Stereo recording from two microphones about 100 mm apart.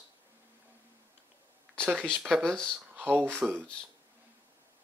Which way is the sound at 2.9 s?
20° right (ahead or behind).